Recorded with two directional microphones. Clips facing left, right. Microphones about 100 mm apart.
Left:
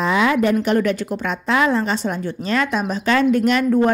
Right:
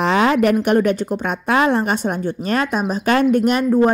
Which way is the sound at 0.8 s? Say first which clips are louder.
Right 2 dB; 40° right (ahead or behind).